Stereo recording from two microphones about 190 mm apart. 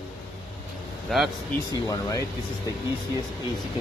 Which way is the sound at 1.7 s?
20° left (ahead or behind).